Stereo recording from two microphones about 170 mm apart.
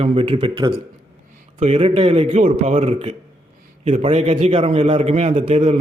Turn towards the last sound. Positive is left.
turn(degrees=-40)  # may be behind; listen again after turning